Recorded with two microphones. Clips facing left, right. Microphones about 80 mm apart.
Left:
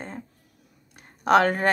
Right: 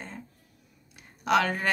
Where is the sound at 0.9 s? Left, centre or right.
Left.